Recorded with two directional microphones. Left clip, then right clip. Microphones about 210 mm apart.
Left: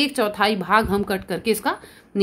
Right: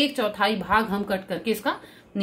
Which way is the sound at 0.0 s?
50° left (ahead or behind).